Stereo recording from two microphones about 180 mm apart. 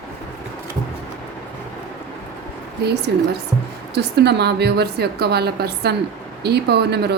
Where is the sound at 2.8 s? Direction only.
65° right (ahead or behind).